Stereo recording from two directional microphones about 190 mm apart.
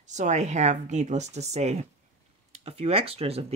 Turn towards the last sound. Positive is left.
turn(degrees=-30)  # may be behind; listen again after turning